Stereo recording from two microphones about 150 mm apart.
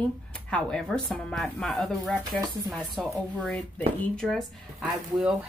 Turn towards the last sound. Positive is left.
turn(degrees=0)  # may be behind; listen again after turning